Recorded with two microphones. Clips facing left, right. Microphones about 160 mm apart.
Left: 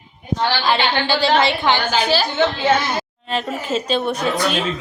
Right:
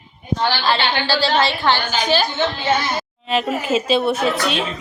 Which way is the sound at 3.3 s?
5° right (ahead or behind).